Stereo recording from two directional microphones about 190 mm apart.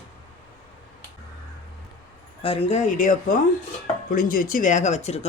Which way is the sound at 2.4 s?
30° left (ahead or behind).